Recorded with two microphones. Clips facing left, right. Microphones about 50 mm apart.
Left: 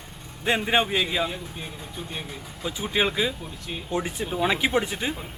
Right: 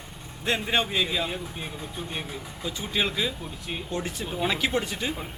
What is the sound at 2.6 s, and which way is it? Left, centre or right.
Speech, centre.